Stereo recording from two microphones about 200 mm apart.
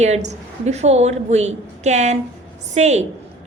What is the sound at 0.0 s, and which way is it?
A woman's voice, 35° right (ahead or behind).